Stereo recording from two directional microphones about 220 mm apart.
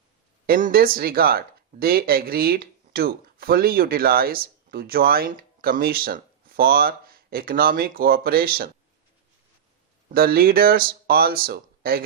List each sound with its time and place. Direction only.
0.4 s speech: 40° right (ahead or behind)
10.1 s speech: 40° right (ahead or behind)